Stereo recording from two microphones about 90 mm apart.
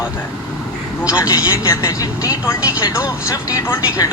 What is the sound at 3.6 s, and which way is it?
Speech, 30° left (ahead or behind).